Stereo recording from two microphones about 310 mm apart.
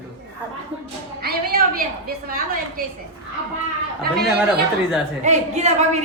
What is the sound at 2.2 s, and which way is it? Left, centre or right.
Speech, right.